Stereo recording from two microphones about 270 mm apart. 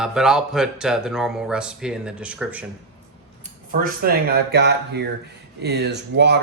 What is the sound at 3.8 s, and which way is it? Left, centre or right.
Speech, right.